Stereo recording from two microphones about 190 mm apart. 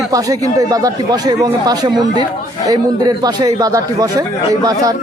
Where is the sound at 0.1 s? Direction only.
20° right (ahead or behind).